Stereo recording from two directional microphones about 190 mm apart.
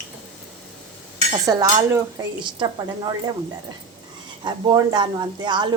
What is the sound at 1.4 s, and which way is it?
Cutlery, 20° right (ahead or behind).